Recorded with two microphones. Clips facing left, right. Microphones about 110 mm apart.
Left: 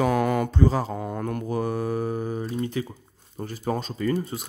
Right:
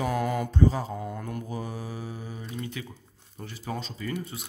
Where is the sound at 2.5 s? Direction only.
35° left (ahead or behind).